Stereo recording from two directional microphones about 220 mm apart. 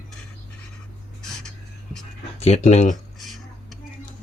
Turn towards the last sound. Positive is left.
turn(degrees=0)  # may be behind; listen again after turning